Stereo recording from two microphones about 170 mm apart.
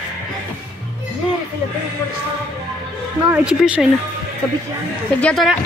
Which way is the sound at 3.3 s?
5° right (ahead or behind).